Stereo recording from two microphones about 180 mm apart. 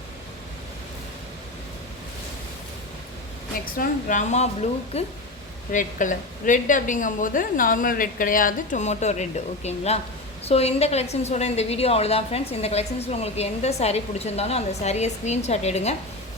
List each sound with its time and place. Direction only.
3.8 s a woman's voice: 45° left (ahead or behind)